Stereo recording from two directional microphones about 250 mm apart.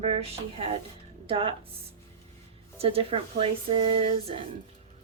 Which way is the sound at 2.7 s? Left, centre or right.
Right.